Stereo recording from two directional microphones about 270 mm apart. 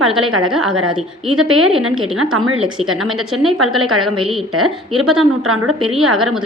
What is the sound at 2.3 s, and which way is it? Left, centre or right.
Speech, right.